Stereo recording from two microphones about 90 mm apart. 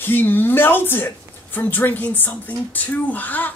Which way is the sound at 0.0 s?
20° left (ahead or behind).